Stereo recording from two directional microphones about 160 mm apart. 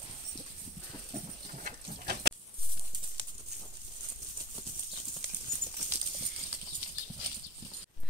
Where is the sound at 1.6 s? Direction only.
90° right.